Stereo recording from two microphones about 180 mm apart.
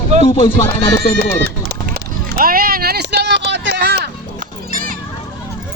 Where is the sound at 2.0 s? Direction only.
55° right (ahead or behind).